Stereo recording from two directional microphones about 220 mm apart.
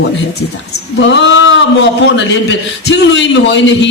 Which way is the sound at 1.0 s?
55° left (ahead or behind).